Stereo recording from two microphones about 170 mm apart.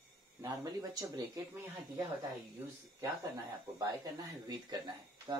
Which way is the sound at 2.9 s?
20° right (ahead or behind).